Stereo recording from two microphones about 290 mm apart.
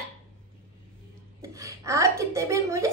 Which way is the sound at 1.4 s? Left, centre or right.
Centre.